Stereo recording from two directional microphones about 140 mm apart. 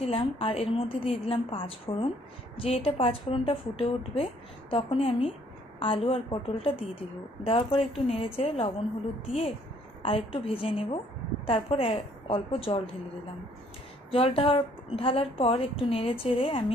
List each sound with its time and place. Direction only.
0.0 s a woman's voice: 40° left (ahead or behind)
10.0 s a woman's voice: 40° left (ahead or behind)
14.1 s a woman's voice: 40° left (ahead or behind)